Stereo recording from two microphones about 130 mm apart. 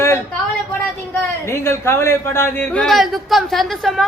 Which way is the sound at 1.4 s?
20° left (ahead or behind).